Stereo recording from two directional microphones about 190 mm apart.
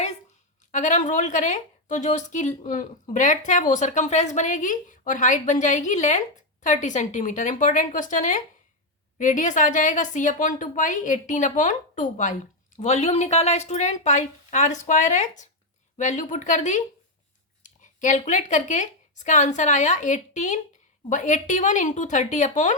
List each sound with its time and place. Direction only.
0.7 s a woman's voice: 40° left (ahead or behind)